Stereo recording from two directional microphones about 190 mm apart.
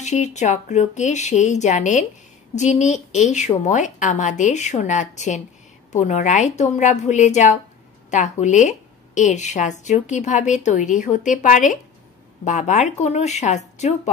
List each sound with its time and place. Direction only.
0.0 s a woman's voice: 35° left (ahead or behind)